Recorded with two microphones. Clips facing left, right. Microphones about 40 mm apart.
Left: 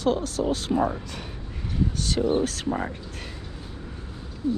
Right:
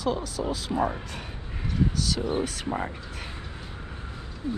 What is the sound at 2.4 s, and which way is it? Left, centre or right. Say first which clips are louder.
Speech: left 4 dB; left.